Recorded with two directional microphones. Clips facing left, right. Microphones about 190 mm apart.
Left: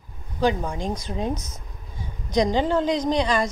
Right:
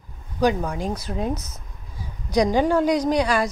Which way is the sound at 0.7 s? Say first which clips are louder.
Right 1 dB; 5° right (ahead or behind).